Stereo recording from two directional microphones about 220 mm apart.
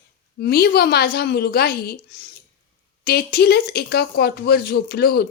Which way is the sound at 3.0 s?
45° left (ahead or behind).